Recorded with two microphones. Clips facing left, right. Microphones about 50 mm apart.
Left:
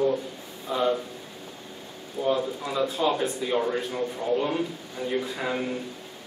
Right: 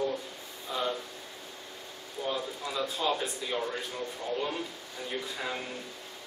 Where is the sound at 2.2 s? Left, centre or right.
Centre.